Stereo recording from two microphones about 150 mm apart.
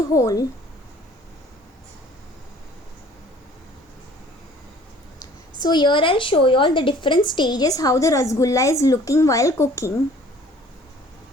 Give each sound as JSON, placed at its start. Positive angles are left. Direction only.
{"t": 0.1, "sound": "a woman's voice", "side_deg": 20}
{"t": 5.5, "sound": "a woman's voice", "side_deg": 30}